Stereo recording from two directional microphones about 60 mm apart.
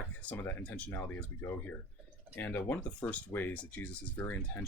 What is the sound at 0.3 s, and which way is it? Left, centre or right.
Speech, left.